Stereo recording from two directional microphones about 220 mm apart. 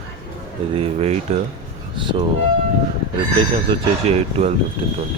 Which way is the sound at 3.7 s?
30° right (ahead or behind).